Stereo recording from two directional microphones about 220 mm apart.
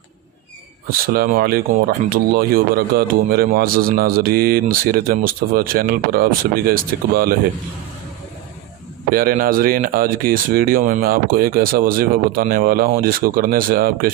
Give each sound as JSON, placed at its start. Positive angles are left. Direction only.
{"t": 0.9, "sound": "speech", "side_deg": -40}
{"t": 9.0, "sound": "speech", "side_deg": -40}